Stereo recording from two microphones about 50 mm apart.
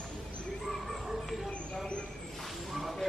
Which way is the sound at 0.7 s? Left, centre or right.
Centre.